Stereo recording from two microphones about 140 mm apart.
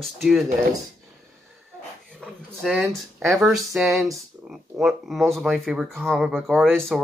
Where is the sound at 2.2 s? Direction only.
Centre (ahead or behind).